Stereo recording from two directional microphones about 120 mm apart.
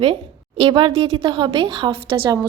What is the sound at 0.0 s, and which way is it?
A woman's voice, 50° right (ahead or behind).